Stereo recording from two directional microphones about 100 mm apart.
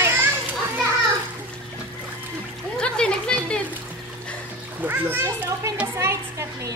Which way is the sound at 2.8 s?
10° left (ahead or behind).